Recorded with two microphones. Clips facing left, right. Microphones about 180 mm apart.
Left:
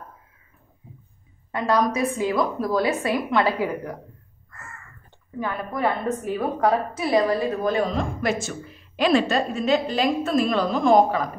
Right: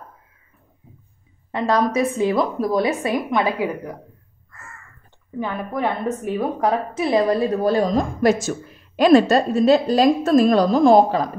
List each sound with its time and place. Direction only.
1.5 s a woman's voice: 25° right (ahead or behind)
5.4 s a woman's voice: 20° right (ahead or behind)